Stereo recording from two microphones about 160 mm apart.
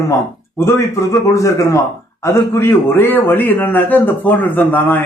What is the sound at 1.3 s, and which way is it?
A man's voice, 20° left (ahead or behind).